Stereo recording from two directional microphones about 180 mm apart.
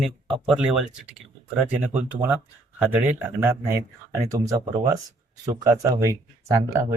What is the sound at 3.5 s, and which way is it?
Speech, 15° right (ahead or behind).